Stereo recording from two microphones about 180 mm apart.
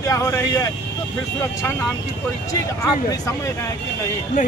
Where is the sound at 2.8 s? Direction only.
20° left (ahead or behind).